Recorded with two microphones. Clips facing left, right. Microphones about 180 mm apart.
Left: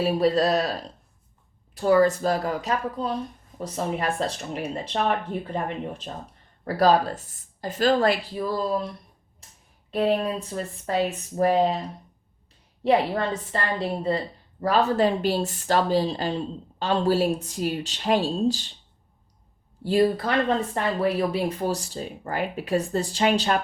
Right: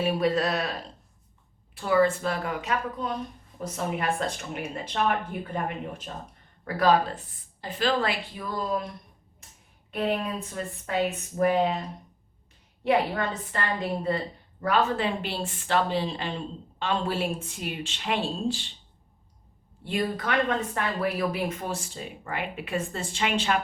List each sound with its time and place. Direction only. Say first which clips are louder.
0.0 s speech: left 4 dB; 35° left (ahead or behind)
9.9 s speech: left 5 dB; 35° left (ahead or behind)
12.8 s speech: left 3 dB; 35° left (ahead or behind)
19.8 s speech: left 8 dB; 35° left (ahead or behind)